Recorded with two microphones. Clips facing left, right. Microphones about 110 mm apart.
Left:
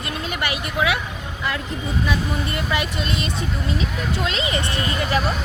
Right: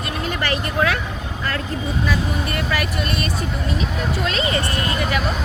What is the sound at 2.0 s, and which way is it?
Speech, 20° left (ahead or behind).